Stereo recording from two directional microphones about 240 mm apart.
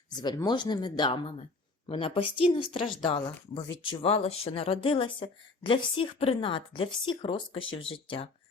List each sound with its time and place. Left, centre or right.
0.1 s a woman's voice: centre